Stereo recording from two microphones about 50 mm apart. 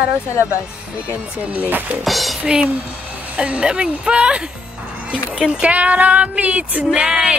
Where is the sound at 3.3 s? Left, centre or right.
Right.